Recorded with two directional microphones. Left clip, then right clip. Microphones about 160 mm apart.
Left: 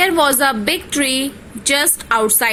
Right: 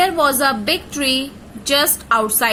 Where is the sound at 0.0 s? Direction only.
25° left (ahead or behind).